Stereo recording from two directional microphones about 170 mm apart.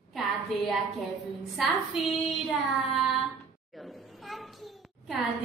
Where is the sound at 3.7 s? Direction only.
Centre (ahead or behind).